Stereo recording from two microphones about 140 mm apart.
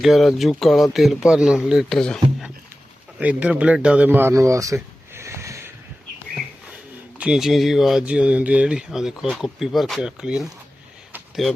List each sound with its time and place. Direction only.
0.0 s speech: centre (ahead or behind)
3.2 s a man's voice: 10° right (ahead or behind)
7.2 s speech: 5° right (ahead or behind)